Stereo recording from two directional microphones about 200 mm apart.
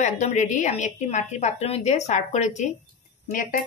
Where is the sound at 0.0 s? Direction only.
35° left (ahead or behind).